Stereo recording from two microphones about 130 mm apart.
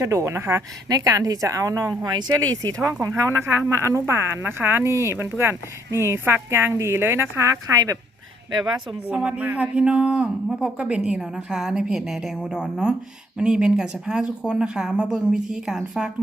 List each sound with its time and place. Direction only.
0.0 s a woman's voice: 20° right (ahead or behind)
9.0 s a man's voice: 10° right (ahead or behind)